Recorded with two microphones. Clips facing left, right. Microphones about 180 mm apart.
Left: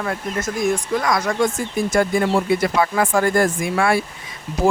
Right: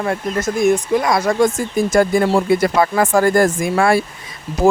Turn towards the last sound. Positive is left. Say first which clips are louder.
# right 4 dB
turn(degrees=-40)  # may be behind; listen again after turning